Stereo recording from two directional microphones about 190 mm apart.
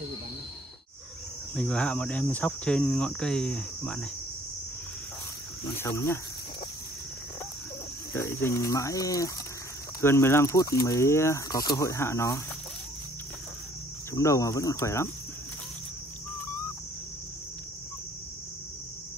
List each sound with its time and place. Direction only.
1.5 s speech: 5° left (ahead or behind)
5.8 s speech: 15° left (ahead or behind)
8.1 s speech: 15° left (ahead or behind)
14.1 s speech: 15° left (ahead or behind)